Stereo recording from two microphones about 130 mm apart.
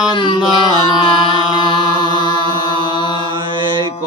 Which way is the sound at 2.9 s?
35° left (ahead or behind).